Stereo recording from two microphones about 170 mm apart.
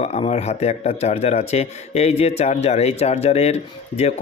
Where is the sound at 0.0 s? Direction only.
40° left (ahead or behind).